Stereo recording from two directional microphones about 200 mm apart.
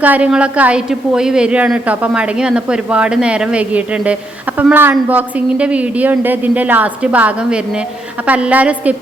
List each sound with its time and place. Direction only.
0.0 s a woman's voice: 5° right (ahead or behind)